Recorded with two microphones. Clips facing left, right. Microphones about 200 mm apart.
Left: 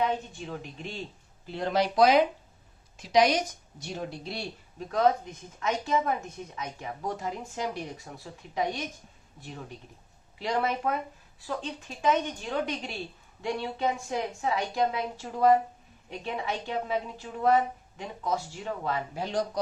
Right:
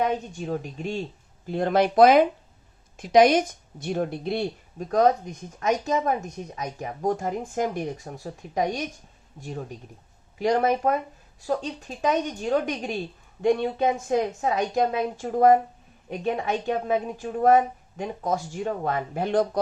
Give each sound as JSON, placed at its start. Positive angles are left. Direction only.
{"t": 0.0, "sound": "speech", "side_deg": -45}
{"t": 4.9, "sound": "speech", "side_deg": -45}